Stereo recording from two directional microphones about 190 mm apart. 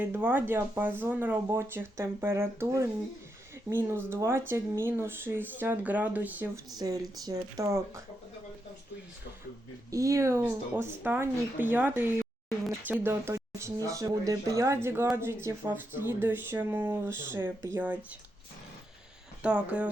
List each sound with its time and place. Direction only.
0.0 s speech: 10° right (ahead or behind)
9.9 s speech: 15° right (ahead or behind)
19.4 s speech: 5° right (ahead or behind)